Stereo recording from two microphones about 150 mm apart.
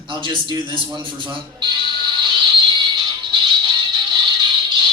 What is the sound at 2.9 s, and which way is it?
Music, 30° right (ahead or behind).